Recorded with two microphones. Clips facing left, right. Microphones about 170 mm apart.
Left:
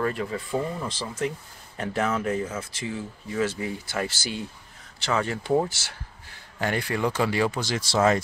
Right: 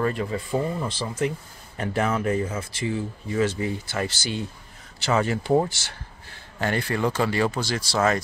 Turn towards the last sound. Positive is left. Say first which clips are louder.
# right 1 dB
turn(degrees=20)  # may be behind; listen again after turning